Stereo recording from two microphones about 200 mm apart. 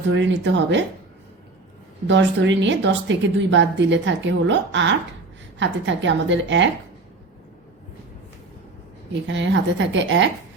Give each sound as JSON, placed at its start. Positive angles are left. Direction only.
{"t": 0.1, "sound": "a woman's voice", "side_deg": -65}
{"t": 2.0, "sound": "a woman's voice", "side_deg": -65}
{"t": 9.2, "sound": "a woman's voice", "side_deg": -65}